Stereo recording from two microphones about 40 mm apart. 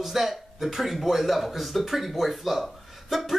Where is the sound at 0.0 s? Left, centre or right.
Centre.